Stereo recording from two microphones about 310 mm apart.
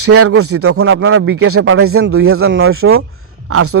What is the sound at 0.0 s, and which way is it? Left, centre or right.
A man's voice, right.